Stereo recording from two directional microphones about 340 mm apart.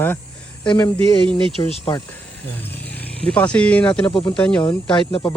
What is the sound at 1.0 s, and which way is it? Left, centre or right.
Speech, centre.